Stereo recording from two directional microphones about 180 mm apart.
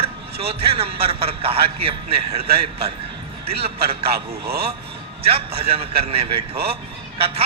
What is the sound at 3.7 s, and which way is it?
Speech, 60° right (ahead or behind).